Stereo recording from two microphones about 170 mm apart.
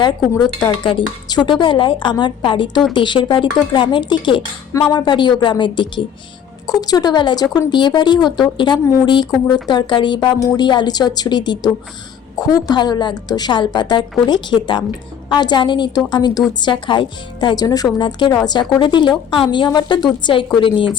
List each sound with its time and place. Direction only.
0.0 s speech: 25° left (ahead or behind)
4.7 s speech: 20° left (ahead or behind)